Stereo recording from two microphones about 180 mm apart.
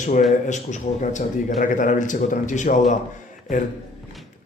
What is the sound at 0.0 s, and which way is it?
A man's voice, 45° left (ahead or behind).